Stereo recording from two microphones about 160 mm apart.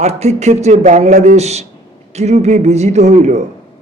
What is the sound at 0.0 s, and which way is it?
A man's voice, 45° right (ahead or behind).